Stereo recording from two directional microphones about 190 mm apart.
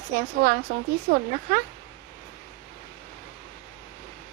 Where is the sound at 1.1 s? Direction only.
50° right (ahead or behind).